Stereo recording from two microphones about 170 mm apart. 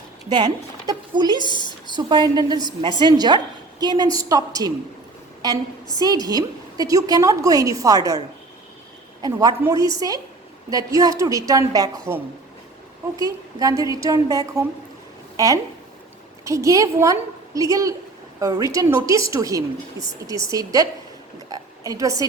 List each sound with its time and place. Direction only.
0.3 s a woman's voice: 25° right (ahead or behind)
6.0 s a woman's voice: 20° right (ahead or behind)
9.2 s a woman's voice: 20° right (ahead or behind)
16.4 s a woman's voice: 20° right (ahead or behind)